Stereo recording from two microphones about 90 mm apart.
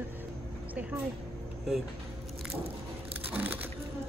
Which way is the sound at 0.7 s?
20° right (ahead or behind).